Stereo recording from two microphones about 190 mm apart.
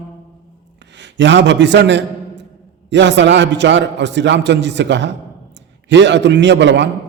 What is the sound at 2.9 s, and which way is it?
Mantra, 70° right (ahead or behind).